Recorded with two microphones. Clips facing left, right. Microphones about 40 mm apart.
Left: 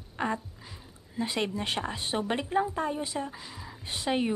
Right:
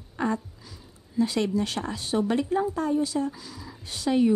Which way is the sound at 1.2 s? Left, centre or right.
Left.